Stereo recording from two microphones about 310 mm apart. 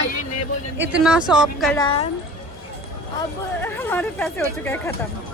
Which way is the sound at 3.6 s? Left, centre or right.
Centre.